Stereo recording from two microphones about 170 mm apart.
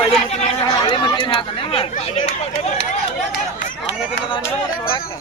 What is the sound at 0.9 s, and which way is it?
Chatter, 25° left (ahead or behind).